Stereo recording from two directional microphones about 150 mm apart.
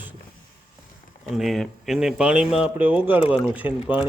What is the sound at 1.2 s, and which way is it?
Speech, centre (ahead or behind).